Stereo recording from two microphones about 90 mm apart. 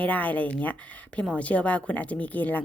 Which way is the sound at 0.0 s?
15° left (ahead or behind).